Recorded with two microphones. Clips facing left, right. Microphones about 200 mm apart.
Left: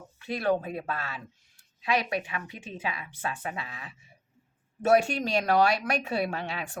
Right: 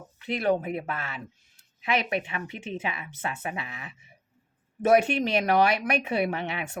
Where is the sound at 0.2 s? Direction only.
20° right (ahead or behind).